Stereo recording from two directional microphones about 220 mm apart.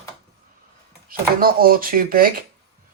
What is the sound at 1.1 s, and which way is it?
Speech, 40° right (ahead or behind).